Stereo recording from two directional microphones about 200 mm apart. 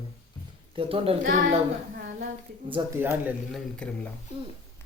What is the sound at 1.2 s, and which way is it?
Speech, 40° right (ahead or behind).